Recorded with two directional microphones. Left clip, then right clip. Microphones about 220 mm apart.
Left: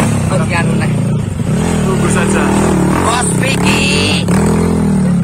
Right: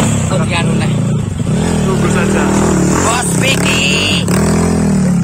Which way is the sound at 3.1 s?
Centre (ahead or behind).